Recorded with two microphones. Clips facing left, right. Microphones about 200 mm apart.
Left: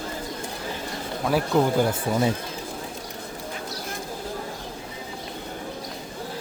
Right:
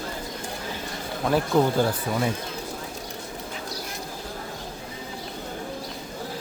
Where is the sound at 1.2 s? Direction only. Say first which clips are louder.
Even; centre (ahead or behind).